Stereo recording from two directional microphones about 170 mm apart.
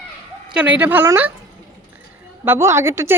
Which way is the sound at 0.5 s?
10° right (ahead or behind).